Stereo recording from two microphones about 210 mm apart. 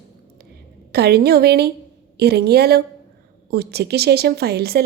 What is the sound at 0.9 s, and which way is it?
A woman's voice, 50° right (ahead or behind).